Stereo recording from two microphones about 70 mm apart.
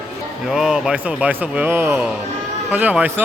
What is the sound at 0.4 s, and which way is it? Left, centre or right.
Speech, centre.